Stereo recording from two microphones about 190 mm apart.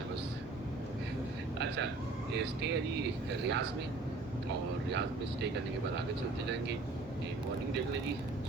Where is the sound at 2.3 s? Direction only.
65° right (ahead or behind).